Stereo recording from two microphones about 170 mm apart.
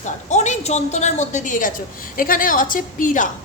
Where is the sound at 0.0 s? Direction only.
45° left (ahead or behind).